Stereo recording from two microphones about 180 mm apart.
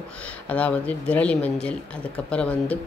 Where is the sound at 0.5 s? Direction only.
10° left (ahead or behind).